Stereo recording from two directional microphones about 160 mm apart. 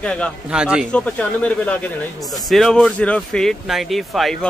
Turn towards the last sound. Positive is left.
turn(degrees=0)  # may be behind; listen again after turning